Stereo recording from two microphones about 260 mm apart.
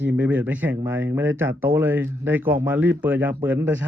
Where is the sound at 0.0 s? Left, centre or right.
Centre.